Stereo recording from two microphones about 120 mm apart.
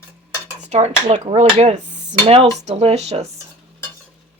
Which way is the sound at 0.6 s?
65° right (ahead or behind).